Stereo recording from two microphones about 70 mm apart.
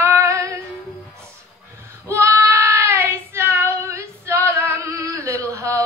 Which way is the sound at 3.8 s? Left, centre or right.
Right.